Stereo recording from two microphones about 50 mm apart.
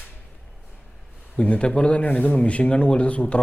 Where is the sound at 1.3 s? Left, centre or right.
Left.